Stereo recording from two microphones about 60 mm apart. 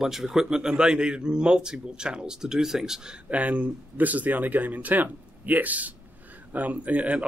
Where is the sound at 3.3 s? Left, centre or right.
Right.